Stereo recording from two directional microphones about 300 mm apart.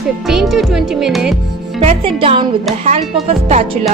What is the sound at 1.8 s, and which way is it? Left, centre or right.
Speech, centre.